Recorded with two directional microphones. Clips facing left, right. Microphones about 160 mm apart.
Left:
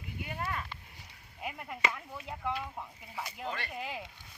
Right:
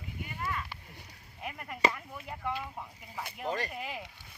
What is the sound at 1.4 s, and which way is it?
Speech, 5° left (ahead or behind).